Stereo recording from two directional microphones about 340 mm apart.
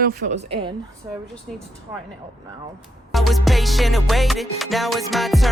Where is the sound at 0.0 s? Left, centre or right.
Right.